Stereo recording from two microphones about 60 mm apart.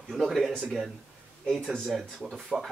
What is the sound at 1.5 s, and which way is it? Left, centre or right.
Speech, centre.